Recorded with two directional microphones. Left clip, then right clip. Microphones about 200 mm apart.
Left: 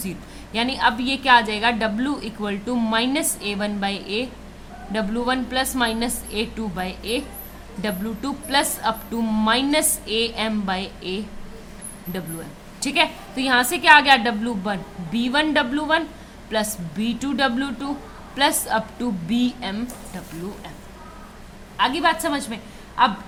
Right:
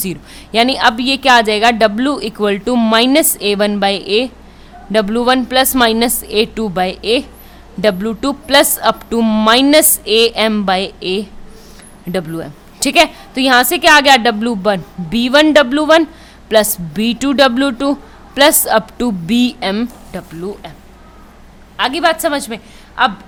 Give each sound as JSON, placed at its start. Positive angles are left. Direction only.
{"t": 0.0, "sound": "a woman's voice", "side_deg": -50}
{"t": 21.8, "sound": "a woman's voice", "side_deg": -55}